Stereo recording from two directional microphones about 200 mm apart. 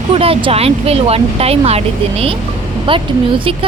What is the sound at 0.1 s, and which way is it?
Speech, 30° right (ahead or behind).